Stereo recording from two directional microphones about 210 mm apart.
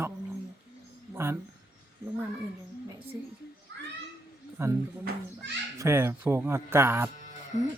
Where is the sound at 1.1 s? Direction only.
10° right (ahead or behind).